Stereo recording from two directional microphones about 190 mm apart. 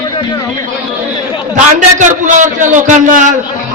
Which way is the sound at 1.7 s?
40° right (ahead or behind).